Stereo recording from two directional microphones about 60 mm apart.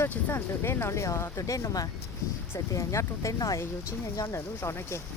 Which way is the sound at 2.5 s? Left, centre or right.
Left.